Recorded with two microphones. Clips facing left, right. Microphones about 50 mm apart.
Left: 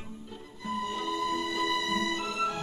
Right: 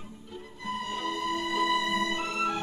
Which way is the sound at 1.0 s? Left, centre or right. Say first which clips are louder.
Even; right.